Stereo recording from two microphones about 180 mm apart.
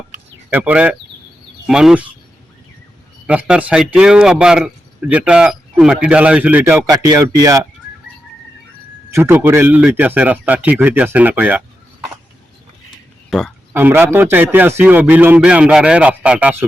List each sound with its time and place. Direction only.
0.5 s a man's voice: 10° right (ahead or behind)
3.2 s a man's voice: 5° right (ahead or behind)
9.0 s a man's voice: 15° right (ahead or behind)
13.3 s a man's voice: centre (ahead or behind)